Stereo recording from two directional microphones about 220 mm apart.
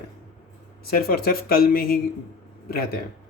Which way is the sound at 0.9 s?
45° left (ahead or behind).